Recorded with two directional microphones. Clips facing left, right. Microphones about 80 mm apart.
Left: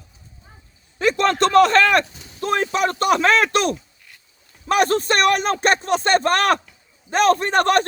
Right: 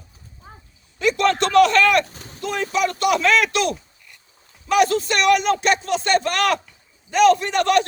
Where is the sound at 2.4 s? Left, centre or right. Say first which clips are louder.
Left 2 dB; left.